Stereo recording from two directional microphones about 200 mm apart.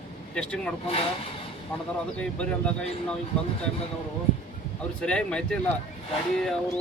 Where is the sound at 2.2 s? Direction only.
5° left (ahead or behind).